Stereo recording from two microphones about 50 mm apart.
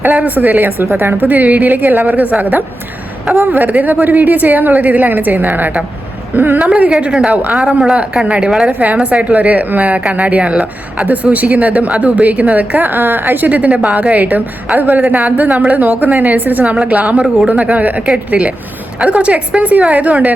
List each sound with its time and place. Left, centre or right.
0.2 s a woman's voice: right
1.3 s a woman's voice: right
7.7 s a woman's voice: centre
8.6 s speech: right
13.7 s a woman's voice: right